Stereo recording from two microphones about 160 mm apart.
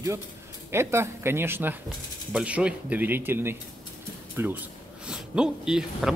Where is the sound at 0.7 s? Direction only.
15° right (ahead or behind).